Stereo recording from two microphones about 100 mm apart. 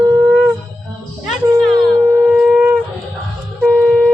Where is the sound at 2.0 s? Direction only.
20° right (ahead or behind).